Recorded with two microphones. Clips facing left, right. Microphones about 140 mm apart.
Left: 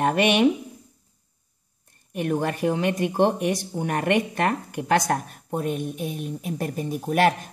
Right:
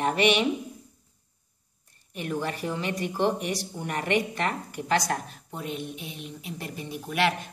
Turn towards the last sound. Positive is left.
turn(degrees=45)  # may be behind; listen again after turning